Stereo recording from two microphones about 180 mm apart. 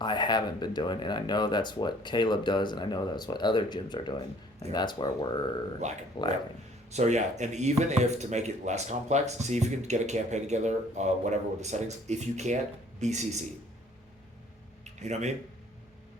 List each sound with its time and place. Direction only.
0.0 s speech: 25° left (ahead or behind)
5.8 s speech: 40° right (ahead or behind)
14.9 s speech: 40° right (ahead or behind)